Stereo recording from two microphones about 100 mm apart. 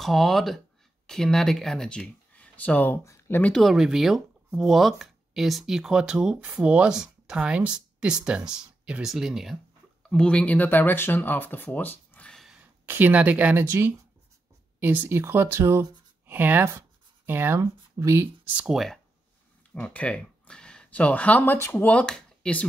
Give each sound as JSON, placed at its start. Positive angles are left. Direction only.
{"t": 0.0, "sound": "speech", "side_deg": 0}
{"t": 3.5, "sound": "speech", "side_deg": -5}
{"t": 10.0, "sound": "speech", "side_deg": 10}
{"t": 12.8, "sound": "speech", "side_deg": -20}
{"t": 18.6, "sound": "speech", "side_deg": -10}
{"t": 19.7, "sound": "speech", "side_deg": 15}
{"t": 21.8, "sound": "speech", "side_deg": 10}